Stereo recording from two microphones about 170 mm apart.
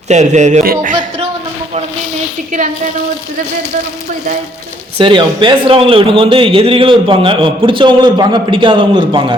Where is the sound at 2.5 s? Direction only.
50° right (ahead or behind).